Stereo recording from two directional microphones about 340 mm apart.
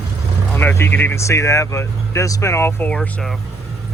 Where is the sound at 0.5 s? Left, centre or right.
Centre.